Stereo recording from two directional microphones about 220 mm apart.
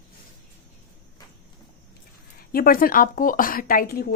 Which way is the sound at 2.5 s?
40° left (ahead or behind).